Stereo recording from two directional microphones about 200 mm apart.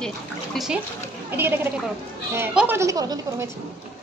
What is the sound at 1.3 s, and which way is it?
Speech, 10° right (ahead or behind).